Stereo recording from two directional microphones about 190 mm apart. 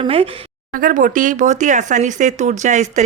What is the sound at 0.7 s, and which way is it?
Speech, 45° right (ahead or behind).